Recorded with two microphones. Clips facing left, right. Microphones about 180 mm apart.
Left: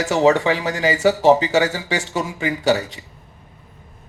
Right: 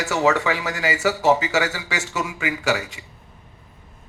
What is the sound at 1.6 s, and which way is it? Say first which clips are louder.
Speech: left 5 dB; 40° left (ahead or behind).